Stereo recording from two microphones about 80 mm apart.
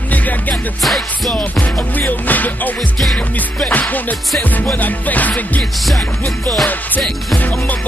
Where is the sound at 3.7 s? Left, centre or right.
Left.